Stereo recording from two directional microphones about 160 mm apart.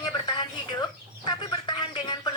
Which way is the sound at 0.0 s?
25° left (ahead or behind).